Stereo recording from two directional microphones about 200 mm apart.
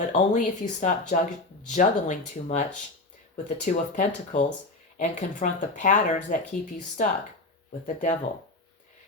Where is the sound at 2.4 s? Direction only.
40° left (ahead or behind).